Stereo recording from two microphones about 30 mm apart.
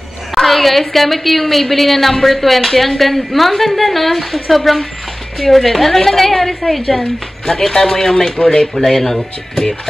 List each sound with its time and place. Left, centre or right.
0.4 s a woman's voice: centre